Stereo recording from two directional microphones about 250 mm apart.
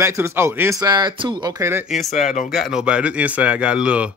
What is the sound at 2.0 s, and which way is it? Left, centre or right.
Speech, left.